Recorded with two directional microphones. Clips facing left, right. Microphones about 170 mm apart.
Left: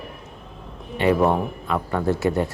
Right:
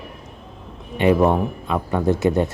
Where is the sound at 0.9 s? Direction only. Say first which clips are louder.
Right 2 dB; 15° right (ahead or behind).